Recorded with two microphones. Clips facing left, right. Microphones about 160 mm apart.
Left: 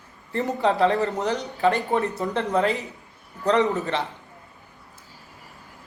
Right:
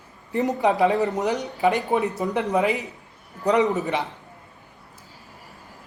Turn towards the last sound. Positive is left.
turn(degrees=-15)  # may be behind; listen again after turning